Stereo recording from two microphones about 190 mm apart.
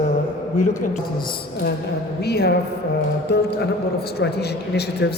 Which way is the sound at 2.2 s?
60° left (ahead or behind).